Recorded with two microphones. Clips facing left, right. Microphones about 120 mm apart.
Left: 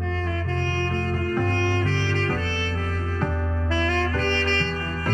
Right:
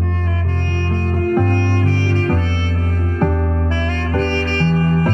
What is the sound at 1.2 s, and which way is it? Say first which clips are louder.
Music: right 9 dB; 55° right (ahead or behind).